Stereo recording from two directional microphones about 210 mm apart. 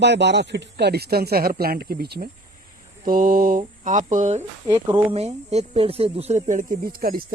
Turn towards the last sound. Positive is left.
turn(degrees=-45)  # may be behind; listen again after turning